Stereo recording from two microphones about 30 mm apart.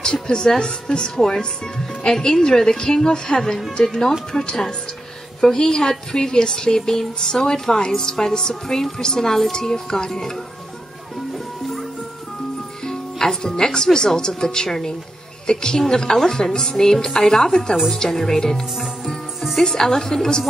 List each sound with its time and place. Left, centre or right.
0.0 s a woman's voice: left
12.8 s music: centre
13.9 s a woman's voice: left